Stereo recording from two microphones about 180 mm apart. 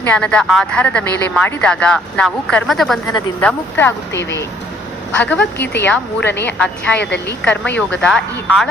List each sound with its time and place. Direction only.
0.0 s speech: 10° left (ahead or behind)
3.4 s a woman's voice: 10° left (ahead or behind)
4.1 s speech: 80° left
5.2 s a woman's voice: 10° left (ahead or behind)
7.0 s a woman's voice: 70° left (ahead or behind)
7.4 s a woman's voice: 5° left (ahead or behind)